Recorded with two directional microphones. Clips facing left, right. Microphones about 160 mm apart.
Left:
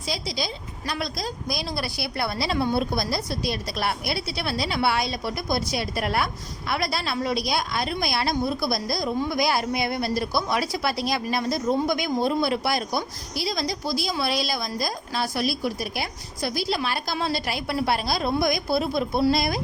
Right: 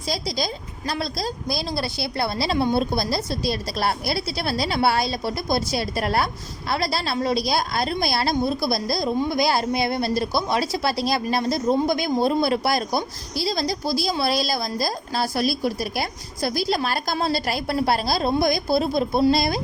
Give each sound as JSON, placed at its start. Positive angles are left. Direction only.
{"t": 0.1, "sound": "a woman's voice", "side_deg": -40}